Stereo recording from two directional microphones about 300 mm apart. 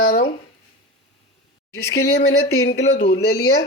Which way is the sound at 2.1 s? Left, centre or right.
Left.